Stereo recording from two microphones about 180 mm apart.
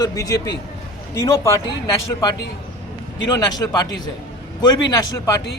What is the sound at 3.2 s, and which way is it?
Speech, 20° left (ahead or behind).